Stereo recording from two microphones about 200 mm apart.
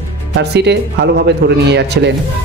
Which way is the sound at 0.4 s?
55° right (ahead or behind).